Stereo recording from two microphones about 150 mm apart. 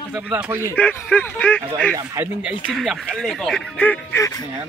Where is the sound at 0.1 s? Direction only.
10° right (ahead or behind).